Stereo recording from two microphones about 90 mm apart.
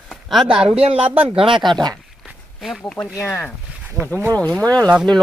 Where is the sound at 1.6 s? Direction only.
55° right (ahead or behind).